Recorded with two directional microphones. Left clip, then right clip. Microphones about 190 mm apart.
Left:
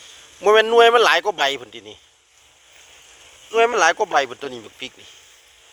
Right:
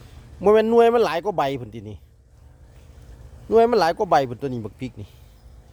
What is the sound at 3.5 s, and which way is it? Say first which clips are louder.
Speech: left 1 dB; 15° right (ahead or behind).